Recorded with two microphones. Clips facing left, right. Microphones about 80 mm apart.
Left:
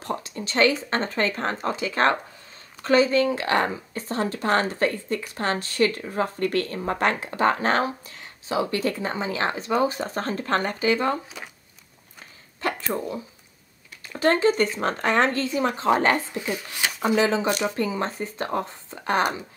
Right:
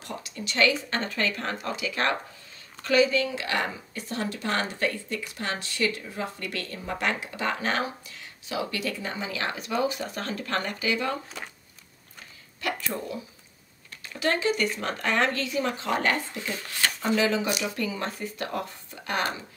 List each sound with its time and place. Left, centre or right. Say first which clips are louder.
0.0 s speech: left 6 dB; left
11.2 s speech: even; centre
12.5 s a sound: left 4 dB; left
14.2 s speech: left 6 dB; left
16.3 s speech: left 3 dB; centre
17.2 s speech: left 4 dB; left